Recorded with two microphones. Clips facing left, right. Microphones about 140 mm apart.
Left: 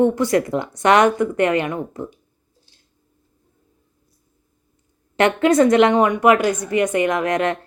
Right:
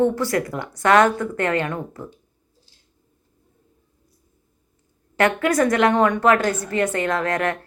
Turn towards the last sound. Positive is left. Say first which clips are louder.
# left 3 dB
turn(degrees=20)  # may be behind; listen again after turning